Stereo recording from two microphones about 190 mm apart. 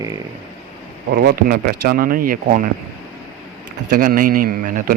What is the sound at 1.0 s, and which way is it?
Speech, 55° right (ahead or behind).